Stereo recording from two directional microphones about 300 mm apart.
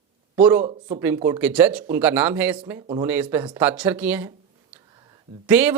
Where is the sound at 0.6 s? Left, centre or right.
Centre.